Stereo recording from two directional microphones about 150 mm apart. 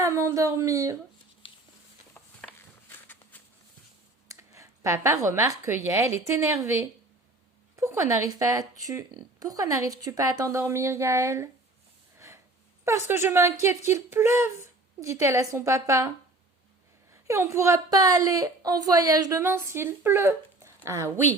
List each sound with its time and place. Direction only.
0.0 s speech: 20° right (ahead or behind)
3.3 s a sound: 10° left (ahead or behind)
4.3 s speech: 20° right (ahead or behind)
7.8 s a woman's voice: 20° right (ahead or behind)
12.8 s a woman's voice: 15° right (ahead or behind)